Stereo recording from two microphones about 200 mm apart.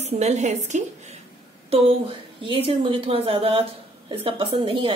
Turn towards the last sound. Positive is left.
turn(degrees=-25)  # may be behind; listen again after turning